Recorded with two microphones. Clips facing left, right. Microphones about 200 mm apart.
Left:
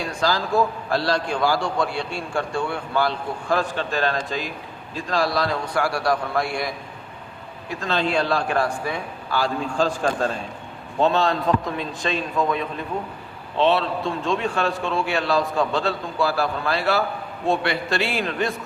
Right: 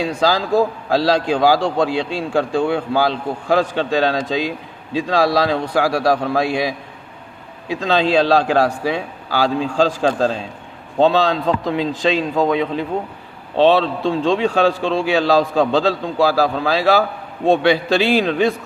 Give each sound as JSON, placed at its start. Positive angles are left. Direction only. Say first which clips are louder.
{"t": 0.9, "sound": "a man's voice", "louder": "right 6 dB", "side_deg": -90}
{"t": 4.9, "sound": "a man's voice", "louder": "right 7 dB", "side_deg": -70}